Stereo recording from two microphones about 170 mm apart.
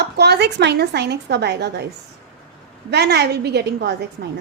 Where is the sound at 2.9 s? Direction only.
80° right.